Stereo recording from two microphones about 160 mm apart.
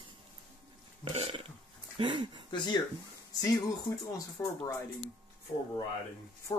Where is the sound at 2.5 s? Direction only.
25° left (ahead or behind).